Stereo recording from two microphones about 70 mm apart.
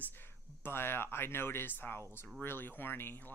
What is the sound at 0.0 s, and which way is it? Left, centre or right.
Speech, left.